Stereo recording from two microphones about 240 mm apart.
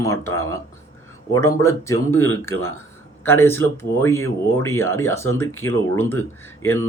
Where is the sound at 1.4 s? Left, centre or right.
Centre.